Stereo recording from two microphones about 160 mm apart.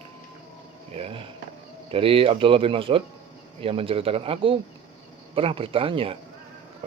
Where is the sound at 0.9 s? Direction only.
35° right (ahead or behind).